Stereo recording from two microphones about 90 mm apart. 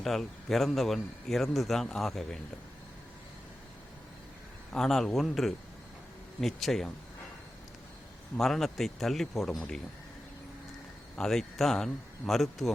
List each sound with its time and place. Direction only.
0.0 s a man's voice: 5° left (ahead or behind)
4.7 s a man's voice: 5° left (ahead or behind)
8.4 s a man's voice: 5° left (ahead or behind)
11.2 s a man's voice: 5° left (ahead or behind)